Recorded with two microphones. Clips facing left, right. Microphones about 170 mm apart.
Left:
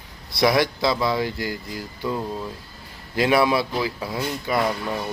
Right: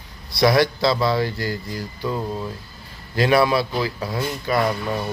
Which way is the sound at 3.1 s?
20° left (ahead or behind).